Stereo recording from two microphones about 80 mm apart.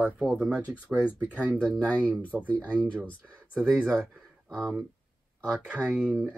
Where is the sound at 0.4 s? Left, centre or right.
Centre.